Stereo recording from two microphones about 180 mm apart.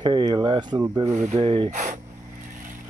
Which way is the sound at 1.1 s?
40° right (ahead or behind).